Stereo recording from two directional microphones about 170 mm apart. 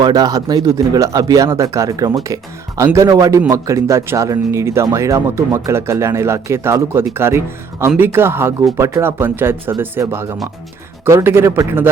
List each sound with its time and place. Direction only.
0.0 s speech: 20° right (ahead or behind)